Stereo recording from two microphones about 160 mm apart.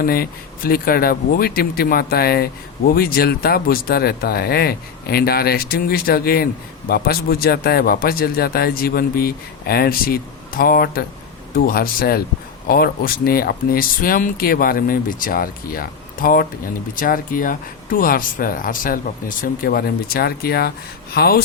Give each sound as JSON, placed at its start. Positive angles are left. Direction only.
{"t": 0.0, "sound": "speech", "side_deg": 65}